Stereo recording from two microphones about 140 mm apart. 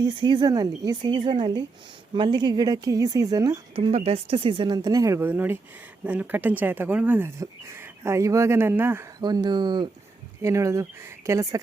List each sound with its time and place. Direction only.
0.0 s speech: 35° right (ahead or behind)
3.8 s speech: 45° right (ahead or behind); by 9.0 s 15° right (ahead or behind)
9.2 s speech: 30° right (ahead or behind)
10.4 s speech: 20° right (ahead or behind)